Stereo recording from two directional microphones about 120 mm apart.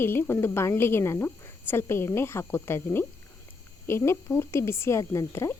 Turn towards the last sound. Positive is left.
turn(degrees=25)  # may be behind; listen again after turning